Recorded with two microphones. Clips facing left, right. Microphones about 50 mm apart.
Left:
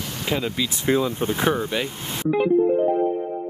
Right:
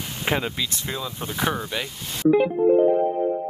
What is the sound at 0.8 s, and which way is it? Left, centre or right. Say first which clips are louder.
Speech: left 9 dB; left.